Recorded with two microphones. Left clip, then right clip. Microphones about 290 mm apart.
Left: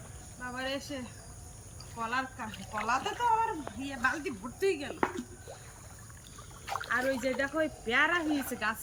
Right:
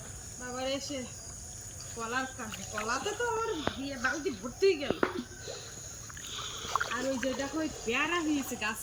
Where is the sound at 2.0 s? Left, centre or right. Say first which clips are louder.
Left 1 dB; centre.